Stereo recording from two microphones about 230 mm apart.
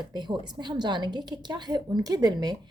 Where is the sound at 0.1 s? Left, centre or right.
Centre.